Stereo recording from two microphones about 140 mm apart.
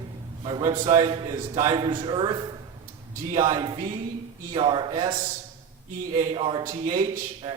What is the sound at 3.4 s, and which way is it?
Speech, 30° right (ahead or behind).